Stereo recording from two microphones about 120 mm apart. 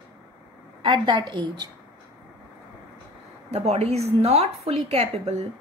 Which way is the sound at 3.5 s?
60° right (ahead or behind).